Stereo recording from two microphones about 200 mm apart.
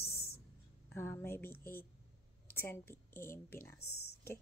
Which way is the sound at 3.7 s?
90° left.